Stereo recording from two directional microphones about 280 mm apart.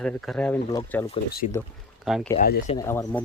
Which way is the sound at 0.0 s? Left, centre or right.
Centre.